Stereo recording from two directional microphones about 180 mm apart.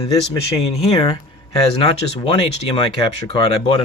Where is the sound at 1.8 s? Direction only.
30° left (ahead or behind).